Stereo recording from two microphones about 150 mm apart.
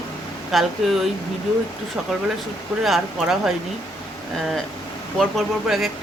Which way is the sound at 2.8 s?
Centre (ahead or behind).